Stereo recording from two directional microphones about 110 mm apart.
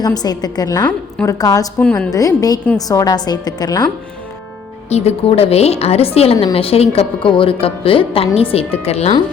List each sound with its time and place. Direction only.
0.0 s a woman's voice: 35° left (ahead or behind)
1.8 s a woman's voice: 10° left (ahead or behind)
2.1 s a woman's voice: 35° left (ahead or behind)
4.9 s a woman's voice: 75° left (ahead or behind)